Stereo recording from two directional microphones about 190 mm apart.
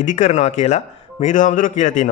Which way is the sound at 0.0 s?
35° left (ahead or behind).